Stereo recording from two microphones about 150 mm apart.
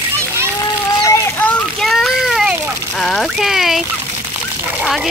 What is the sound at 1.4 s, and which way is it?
Water, centre (ahead or behind).